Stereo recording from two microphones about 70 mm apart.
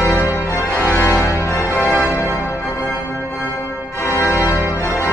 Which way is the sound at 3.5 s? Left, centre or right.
Left.